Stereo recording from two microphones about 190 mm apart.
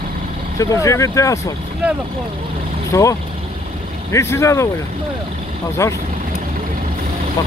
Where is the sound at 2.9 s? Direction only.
15° left (ahead or behind).